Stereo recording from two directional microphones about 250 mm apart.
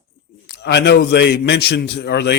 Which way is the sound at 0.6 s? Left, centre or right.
Left.